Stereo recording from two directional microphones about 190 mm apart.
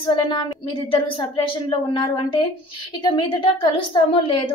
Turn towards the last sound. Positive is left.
turn(degrees=25)  # may be behind; listen again after turning